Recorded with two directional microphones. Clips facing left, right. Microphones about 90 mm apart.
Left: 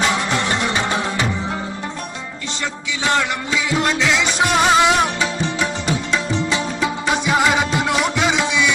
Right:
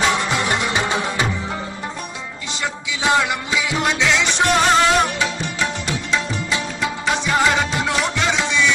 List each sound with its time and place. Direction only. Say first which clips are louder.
0.0 s music: even; centre (ahead or behind)
0.7 s music: even; 15° right (ahead or behind)
3.0 s music: right 1 dB; 15° right (ahead or behind)
3.7 s music: left 1 dB; centre (ahead or behind)
6.8 s music: left 2 dB; 10° left (ahead or behind)